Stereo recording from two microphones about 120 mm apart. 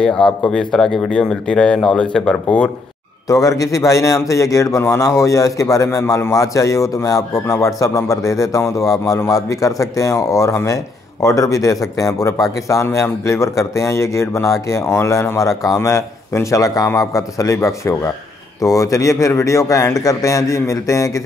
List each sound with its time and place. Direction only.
0.0 s speech: 5° left (ahead or behind)
3.3 s a man's voice: 30° left (ahead or behind)